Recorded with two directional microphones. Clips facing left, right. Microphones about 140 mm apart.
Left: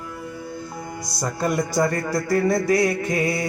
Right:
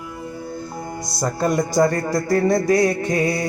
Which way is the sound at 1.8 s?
40° right (ahead or behind).